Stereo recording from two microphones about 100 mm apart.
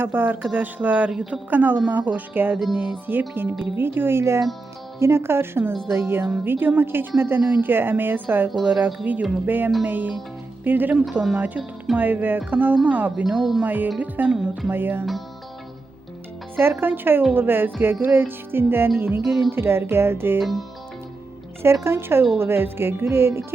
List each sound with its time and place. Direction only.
0.0 s speech: 20° right (ahead or behind)
13.2 s speech: centre (ahead or behind)
13.7 s speech: 15° right (ahead or behind)
16.6 s speech: 20° right (ahead or behind)
19.2 s speech: centre (ahead or behind)
19.5 s speech: 25° right (ahead or behind)
20.4 s speech: centre (ahead or behind)
21.6 s speech: 25° right (ahead or behind)